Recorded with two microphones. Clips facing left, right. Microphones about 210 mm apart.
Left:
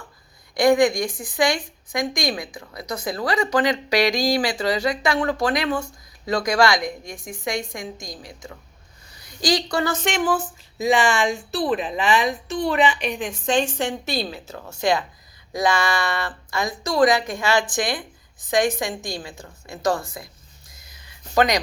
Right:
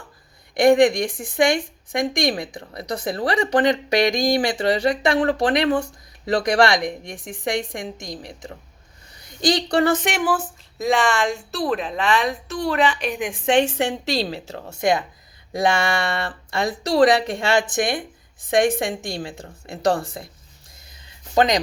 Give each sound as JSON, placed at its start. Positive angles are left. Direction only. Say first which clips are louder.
{"t": 1.4, "sound": "a woman's voice", "louder": "right 3 dB", "side_deg": -25}
{"t": 9.5, "sound": "a woman's voice", "louder": "right 3 dB", "side_deg": -30}
{"t": 10.0, "sound": "a woman's voice", "louder": "even", "side_deg": -10}
{"t": 13.1, "sound": "a woman's voice", "louder": "right 2 dB", "side_deg": -10}
{"t": 13.5, "sound": "a woman's voice", "louder": "right 3 dB", "side_deg": -65}
{"t": 14.2, "sound": "a woman's voice", "louder": "right 3 dB", "side_deg": -30}
{"t": 21.3, "sound": "a woman's voice", "louder": "right 1 dB", "side_deg": -25}